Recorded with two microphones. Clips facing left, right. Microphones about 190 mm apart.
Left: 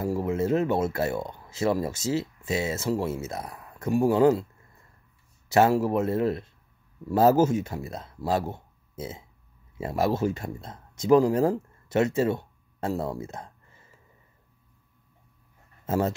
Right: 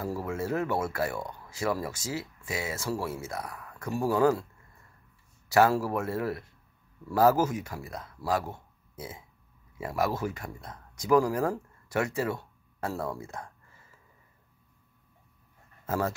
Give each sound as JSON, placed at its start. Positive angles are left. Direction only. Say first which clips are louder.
{"t": 0.0, "sound": "speech", "louder": "left 6 dB", "side_deg": 20}
{"t": 5.5, "sound": "speech", "louder": "left 3 dB", "side_deg": 20}